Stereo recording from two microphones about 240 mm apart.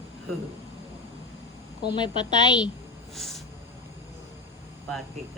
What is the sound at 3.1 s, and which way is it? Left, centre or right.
Snort, centre.